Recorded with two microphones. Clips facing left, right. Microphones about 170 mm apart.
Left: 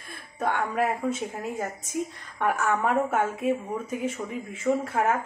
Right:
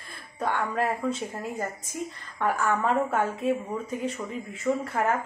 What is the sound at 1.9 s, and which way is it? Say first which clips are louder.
A woman's voice: left 4 dB; 15° left (ahead or behind).